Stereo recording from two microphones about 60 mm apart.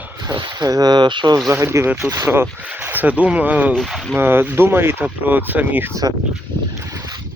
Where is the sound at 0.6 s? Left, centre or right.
Right.